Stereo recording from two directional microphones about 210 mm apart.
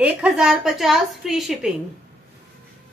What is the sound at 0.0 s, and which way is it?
Speech, 5° right (ahead or behind).